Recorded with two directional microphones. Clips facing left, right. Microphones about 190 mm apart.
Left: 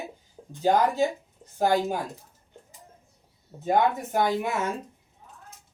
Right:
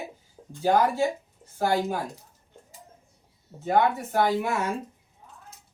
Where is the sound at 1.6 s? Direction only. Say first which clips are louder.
Left 2 dB; 15° left (ahead or behind).